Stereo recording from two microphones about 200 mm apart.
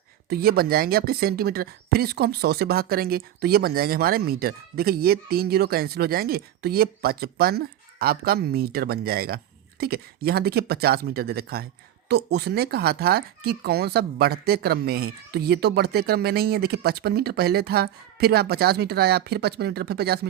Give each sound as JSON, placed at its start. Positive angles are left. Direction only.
{"t": 0.3, "sound": "speech", "side_deg": -50}